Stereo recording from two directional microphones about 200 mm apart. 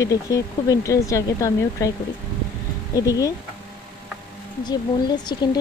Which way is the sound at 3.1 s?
15° left (ahead or behind).